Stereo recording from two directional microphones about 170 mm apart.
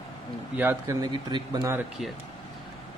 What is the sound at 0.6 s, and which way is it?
Speech, 15° right (ahead or behind).